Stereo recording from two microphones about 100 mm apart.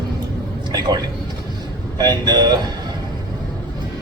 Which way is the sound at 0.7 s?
45° right (ahead or behind).